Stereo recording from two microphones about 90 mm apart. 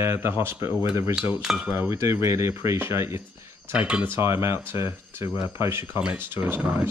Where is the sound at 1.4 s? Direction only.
10° right (ahead or behind).